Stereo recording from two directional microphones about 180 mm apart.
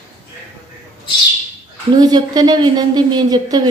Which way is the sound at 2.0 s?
20° right (ahead or behind).